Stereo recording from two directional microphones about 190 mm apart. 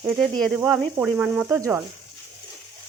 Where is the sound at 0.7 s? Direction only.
10° right (ahead or behind).